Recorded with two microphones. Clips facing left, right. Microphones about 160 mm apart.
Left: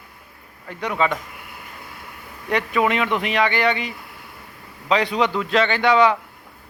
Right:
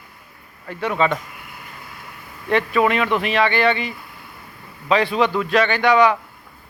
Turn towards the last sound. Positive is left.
turn(degrees=20)  # may be behind; listen again after turning